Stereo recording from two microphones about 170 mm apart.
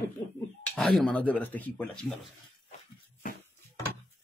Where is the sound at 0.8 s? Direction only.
Centre (ahead or behind).